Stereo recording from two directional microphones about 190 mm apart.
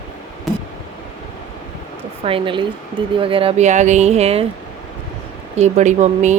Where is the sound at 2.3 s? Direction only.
25° right (ahead or behind).